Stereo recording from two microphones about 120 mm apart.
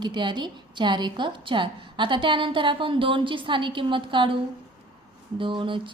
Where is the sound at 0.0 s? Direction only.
40° right (ahead or behind).